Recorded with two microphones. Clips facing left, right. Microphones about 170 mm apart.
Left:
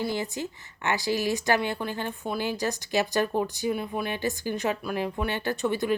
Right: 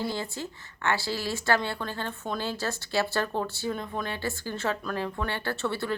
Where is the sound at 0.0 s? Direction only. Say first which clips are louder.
Left 3 dB; 15° left (ahead or behind).